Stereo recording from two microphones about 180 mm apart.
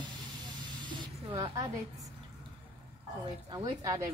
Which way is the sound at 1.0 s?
20° right (ahead or behind).